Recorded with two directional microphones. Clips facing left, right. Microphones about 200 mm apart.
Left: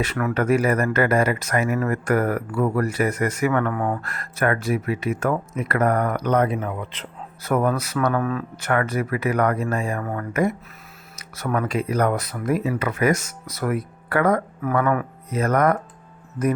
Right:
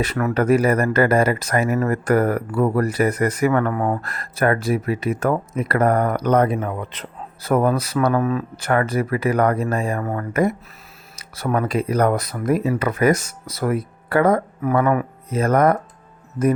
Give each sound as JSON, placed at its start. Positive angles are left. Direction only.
{"t": 0.0, "sound": "speech", "side_deg": -35}
{"t": 8.5, "sound": "speech", "side_deg": -30}